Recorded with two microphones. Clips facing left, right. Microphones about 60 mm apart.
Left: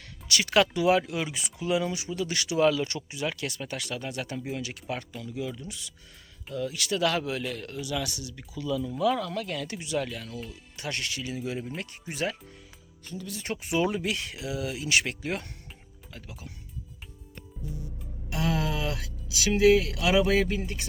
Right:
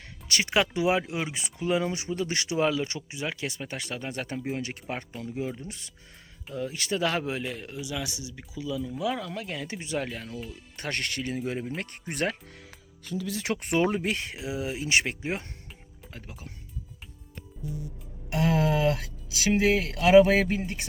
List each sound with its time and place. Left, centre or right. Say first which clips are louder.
0.0 s a sound: even; right
0.5 s speech: left 3 dB; right
10.5 s speech: right 3 dB; right
13.1 s speech: right 5 dB; right
13.6 s speech: right 1 dB; right
16.1 s speech: even; right
18.3 s speech: right 4 dB; right